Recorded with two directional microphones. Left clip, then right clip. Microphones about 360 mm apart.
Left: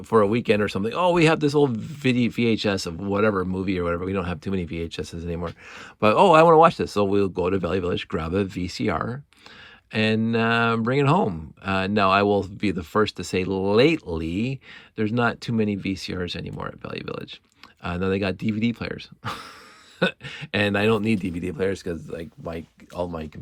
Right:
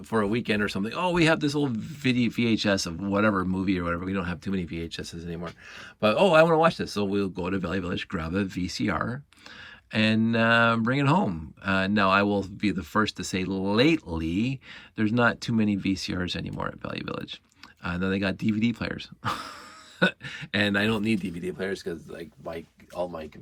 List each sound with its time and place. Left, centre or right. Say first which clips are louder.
0.1 s speech: left 7 dB; centre